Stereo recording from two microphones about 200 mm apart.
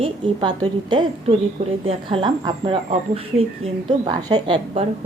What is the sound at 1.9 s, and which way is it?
A woman's voice, 25° right (ahead or behind).